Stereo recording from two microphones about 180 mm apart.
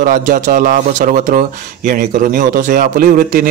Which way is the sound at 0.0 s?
50° right (ahead or behind).